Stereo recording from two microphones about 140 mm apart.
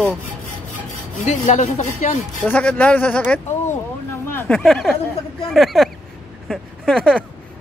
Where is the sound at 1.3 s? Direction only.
60° left (ahead or behind).